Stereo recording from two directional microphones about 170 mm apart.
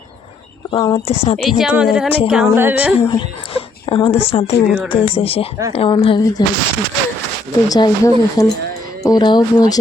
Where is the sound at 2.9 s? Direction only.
30° left (ahead or behind).